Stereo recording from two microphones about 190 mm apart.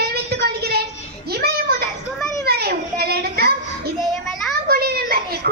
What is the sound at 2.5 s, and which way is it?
Children playing, 55° right (ahead or behind).